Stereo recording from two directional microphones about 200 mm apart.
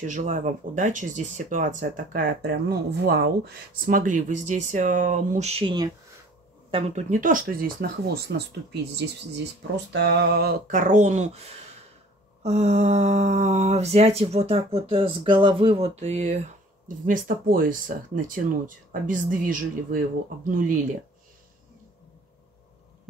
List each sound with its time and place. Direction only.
0.0 s speech: 40° right (ahead or behind); by 3.3 s 55° right (ahead or behind)
3.8 s speech: 40° right (ahead or behind); by 5.9 s 25° right (ahead or behind)
6.7 s speech: 35° right (ahead or behind)